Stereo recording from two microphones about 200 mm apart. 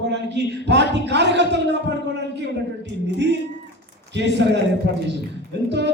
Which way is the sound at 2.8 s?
60° right (ahead or behind).